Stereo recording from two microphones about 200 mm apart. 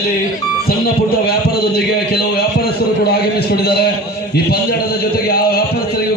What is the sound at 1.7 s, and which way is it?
A man's voice, 55° left (ahead or behind).